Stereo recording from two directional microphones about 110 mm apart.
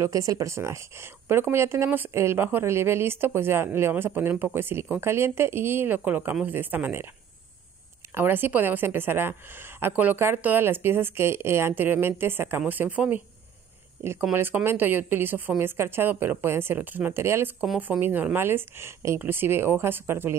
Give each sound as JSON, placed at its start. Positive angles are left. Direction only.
{"t": 0.0, "sound": "a woman's voice", "side_deg": -30}
{"t": 8.1, "sound": "a woman's voice", "side_deg": -20}
{"t": 14.3, "sound": "a woman's voice", "side_deg": -20}